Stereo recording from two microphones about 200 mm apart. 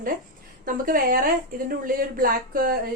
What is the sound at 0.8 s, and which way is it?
A woman's voice, 45° right (ahead or behind).